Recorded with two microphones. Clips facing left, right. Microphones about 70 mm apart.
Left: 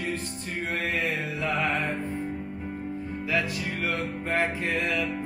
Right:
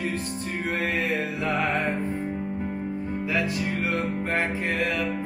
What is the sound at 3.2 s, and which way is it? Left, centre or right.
Music, right.